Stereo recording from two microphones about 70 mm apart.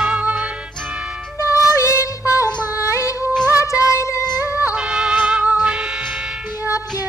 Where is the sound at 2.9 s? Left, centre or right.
Left.